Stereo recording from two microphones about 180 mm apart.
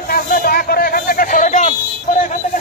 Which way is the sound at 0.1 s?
55° left (ahead or behind).